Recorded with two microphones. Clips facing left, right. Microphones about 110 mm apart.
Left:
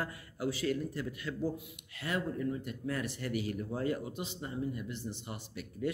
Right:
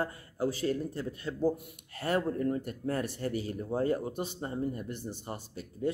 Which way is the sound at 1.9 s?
45° right (ahead or behind).